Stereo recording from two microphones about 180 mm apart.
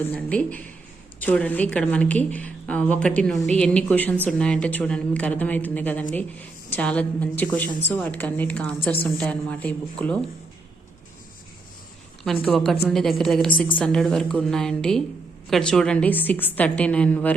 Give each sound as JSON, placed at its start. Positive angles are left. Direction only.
{"t": 0.0, "sound": "a woman's voice", "side_deg": 10}
{"t": 12.2, "sound": "a woman's voice", "side_deg": 5}